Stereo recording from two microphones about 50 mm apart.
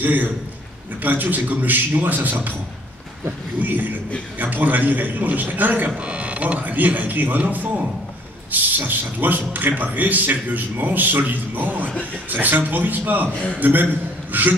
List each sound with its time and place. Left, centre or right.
0.0 s a man's voice: right
3.5 s a man's voice: right
5.9 s a man's voice: right